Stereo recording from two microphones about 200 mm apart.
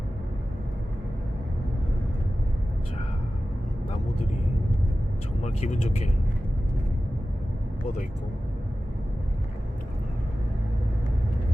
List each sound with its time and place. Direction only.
5.4 s speech: 35° left (ahead or behind)